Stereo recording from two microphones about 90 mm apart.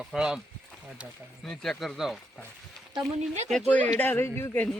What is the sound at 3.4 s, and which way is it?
Speech, 5° left (ahead or behind).